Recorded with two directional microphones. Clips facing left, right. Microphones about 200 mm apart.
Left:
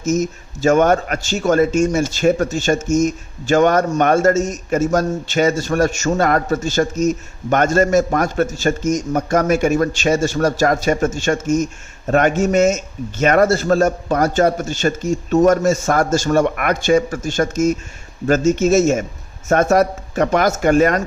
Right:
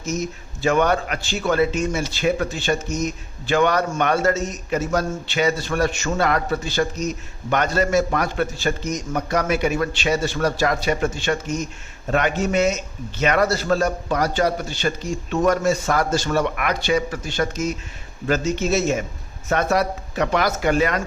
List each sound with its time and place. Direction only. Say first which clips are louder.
0.0 s speech: left 7 dB; 45° left (ahead or behind)